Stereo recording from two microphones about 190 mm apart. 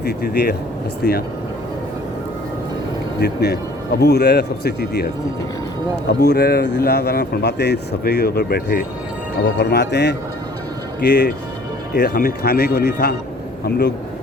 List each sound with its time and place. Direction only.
0.0 s speech: 60° left (ahead or behind)
3.2 s speech: 60° left (ahead or behind)
6.1 s speech: 60° left (ahead or behind)